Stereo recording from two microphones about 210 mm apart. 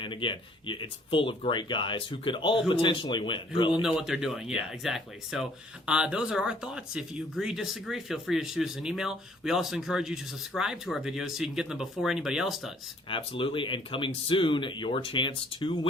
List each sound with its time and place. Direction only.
0.0 s speech: 25° left (ahead or behind)
3.8 s speech: centre (ahead or behind)
13.1 s speech: 25° left (ahead or behind)